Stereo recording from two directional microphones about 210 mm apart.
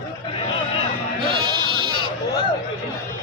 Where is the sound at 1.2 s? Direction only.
25° right (ahead or behind).